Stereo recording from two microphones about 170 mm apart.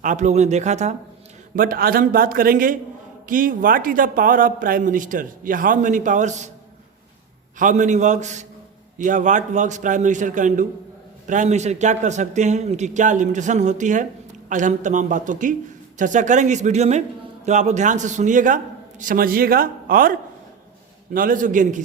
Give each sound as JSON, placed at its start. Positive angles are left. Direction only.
{"t": 0.0, "sound": "speech", "side_deg": -45}
{"t": 1.5, "sound": "a man's voice", "side_deg": -55}
{"t": 7.6, "sound": "speech", "side_deg": -45}